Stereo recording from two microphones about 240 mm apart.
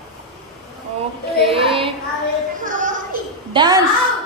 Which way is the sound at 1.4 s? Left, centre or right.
Right.